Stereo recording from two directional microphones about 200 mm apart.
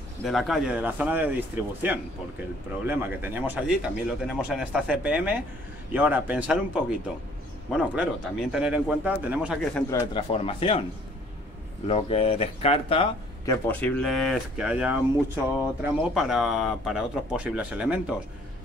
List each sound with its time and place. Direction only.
0.2 s speech: centre (ahead or behind)
9.8 s speech: 15° left (ahead or behind)
10.3 s speech: 30° left (ahead or behind)
11.9 s speech: 30° left (ahead or behind)
13.5 s speech: 10° left (ahead or behind)